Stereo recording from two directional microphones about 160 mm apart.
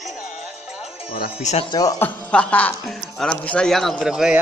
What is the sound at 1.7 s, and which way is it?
Speech, 25° left (ahead or behind).